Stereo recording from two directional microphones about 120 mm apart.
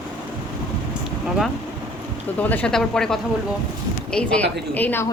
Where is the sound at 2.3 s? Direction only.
10° left (ahead or behind).